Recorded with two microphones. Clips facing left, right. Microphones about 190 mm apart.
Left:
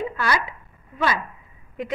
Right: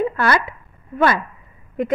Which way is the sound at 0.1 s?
55° right (ahead or behind).